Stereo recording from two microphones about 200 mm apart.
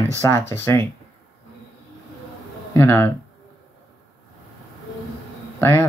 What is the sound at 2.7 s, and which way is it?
Speech, 10° left (ahead or behind).